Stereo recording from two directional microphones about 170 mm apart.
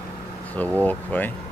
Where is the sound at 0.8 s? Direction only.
10° left (ahead or behind).